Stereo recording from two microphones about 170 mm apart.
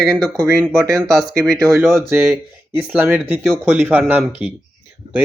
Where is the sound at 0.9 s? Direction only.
20° right (ahead or behind).